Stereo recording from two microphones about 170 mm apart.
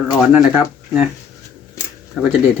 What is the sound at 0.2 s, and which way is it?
Speech, 5° right (ahead or behind).